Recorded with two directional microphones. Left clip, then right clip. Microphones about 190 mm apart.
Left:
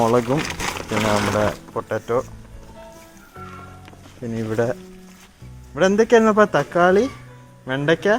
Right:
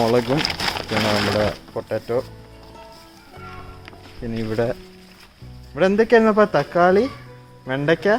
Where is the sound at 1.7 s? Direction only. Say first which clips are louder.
Left 1 dB; 10° left (ahead or behind).